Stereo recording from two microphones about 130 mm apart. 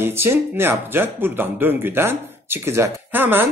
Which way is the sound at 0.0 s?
20° right (ahead or behind).